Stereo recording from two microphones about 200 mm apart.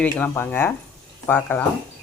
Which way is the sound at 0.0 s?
10° left (ahead or behind).